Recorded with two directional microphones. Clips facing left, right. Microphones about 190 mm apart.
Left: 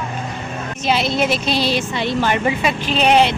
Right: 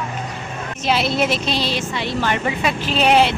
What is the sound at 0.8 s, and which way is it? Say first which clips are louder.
Speech: left 1 dB; centre (ahead or behind).